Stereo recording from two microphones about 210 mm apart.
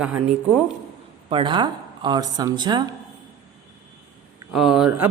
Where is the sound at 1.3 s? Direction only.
25° right (ahead or behind).